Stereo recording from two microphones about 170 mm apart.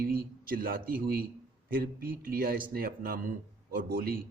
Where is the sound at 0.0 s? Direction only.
60° right (ahead or behind).